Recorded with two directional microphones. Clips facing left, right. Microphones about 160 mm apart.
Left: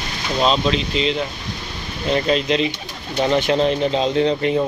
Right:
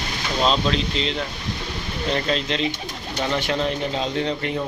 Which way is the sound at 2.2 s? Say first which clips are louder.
Left 5 dB; 15° left (ahead or behind).